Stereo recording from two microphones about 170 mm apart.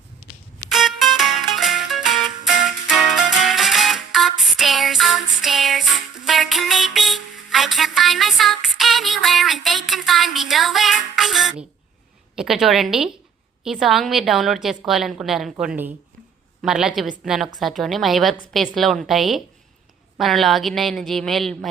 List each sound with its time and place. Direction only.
0.7 s music: centre (ahead or behind)
12.4 s a woman's voice: centre (ahead or behind)